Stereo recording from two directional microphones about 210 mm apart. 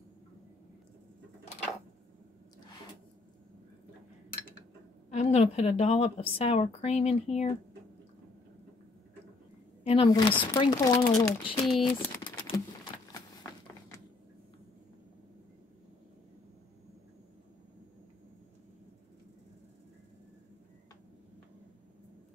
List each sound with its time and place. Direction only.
5.1 s a woman's voice: 30° left (ahead or behind)
9.8 s a woman's voice: 25° left (ahead or behind)
10.3 s speech: 10° left (ahead or behind)
10.6 s a woman's voice: 20° left (ahead or behind)
11.9 s typing: 20° left (ahead or behind)
13.1 s a sound: 15° left (ahead or behind)